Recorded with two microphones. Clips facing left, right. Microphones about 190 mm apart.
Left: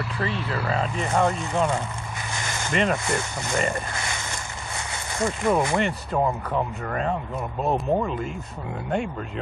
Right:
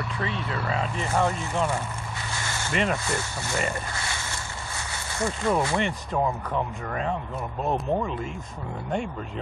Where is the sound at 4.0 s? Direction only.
20° left (ahead or behind).